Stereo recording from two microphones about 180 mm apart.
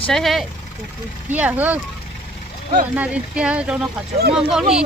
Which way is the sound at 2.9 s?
10° right (ahead or behind).